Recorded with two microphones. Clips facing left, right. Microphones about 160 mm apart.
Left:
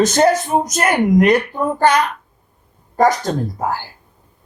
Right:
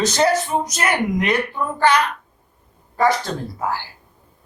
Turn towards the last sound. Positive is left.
turn(degrees=45)  # may be behind; listen again after turning